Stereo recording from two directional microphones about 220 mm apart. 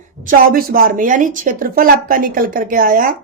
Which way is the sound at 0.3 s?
40° right (ahead or behind).